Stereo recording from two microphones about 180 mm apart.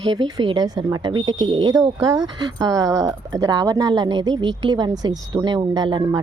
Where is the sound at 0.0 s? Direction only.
25° right (ahead or behind).